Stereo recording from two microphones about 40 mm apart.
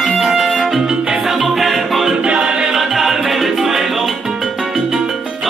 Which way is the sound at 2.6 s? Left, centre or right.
Centre.